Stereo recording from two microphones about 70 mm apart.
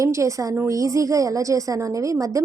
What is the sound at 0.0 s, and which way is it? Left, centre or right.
A woman's voice, right.